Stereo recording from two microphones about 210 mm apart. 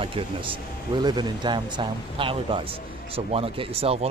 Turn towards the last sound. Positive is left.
turn(degrees=-30)  # may be behind; listen again after turning